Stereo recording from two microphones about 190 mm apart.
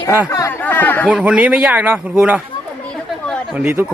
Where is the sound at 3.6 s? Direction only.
10° right (ahead or behind).